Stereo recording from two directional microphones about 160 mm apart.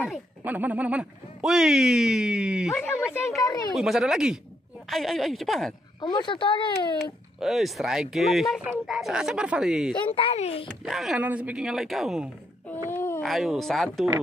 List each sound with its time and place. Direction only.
0.4 s speech: 10° right (ahead or behind)
2.7 s speech: 15° left (ahead or behind)
3.7 s speech: 5° right (ahead or behind)
5.9 s speech: 30° left (ahead or behind)
7.0 s speech: centre (ahead or behind)
10.0 s a child's voice: 35° left (ahead or behind)
10.7 s speech: centre (ahead or behind)
12.9 s a sound: 15° left (ahead or behind)
13.2 s speech: centre (ahead or behind)